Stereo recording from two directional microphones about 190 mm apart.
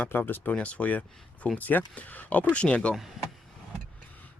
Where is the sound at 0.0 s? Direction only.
10° left (ahead or behind).